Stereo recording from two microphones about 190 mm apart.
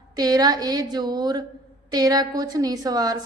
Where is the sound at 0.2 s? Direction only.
20° right (ahead or behind).